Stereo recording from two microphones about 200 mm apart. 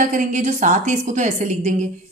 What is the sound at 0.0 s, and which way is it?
A woman's voice, 40° right (ahead or behind).